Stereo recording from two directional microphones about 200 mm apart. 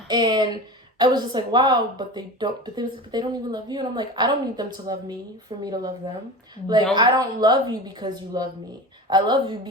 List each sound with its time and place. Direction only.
0.1 s speech: 20° right (ahead or behind)
6.9 s speech: 20° right (ahead or behind)